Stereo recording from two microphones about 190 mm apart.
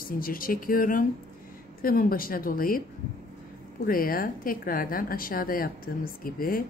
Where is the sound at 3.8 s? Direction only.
50° left (ahead or behind).